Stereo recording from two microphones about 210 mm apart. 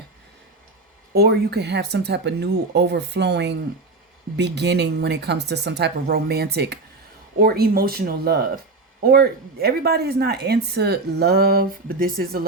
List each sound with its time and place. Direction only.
1.1 s speech: 50° right (ahead or behind)